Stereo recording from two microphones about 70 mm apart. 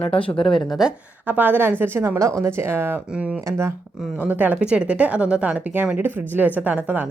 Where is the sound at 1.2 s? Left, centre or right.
Right.